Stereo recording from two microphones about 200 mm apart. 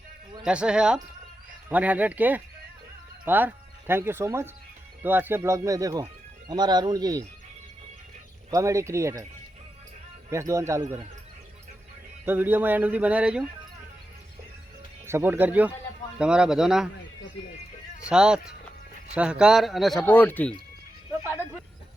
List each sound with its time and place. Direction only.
0.4 s speech: 5° right (ahead or behind)
8.4 s speech: 15° right (ahead or behind)
10.2 s speech: 15° right (ahead or behind)
12.2 s speech: 10° right (ahead or behind)
15.0 s speech: 10° right (ahead or behind)
18.0 s speech: 5° right (ahead or behind)